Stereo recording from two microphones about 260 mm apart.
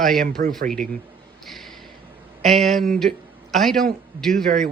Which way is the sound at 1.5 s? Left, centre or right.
Centre.